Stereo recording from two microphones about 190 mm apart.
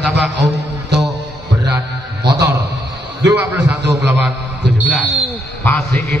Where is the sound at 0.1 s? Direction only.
65° right (ahead or behind).